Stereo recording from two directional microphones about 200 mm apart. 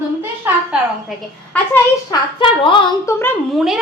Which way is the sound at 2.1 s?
20° left (ahead or behind).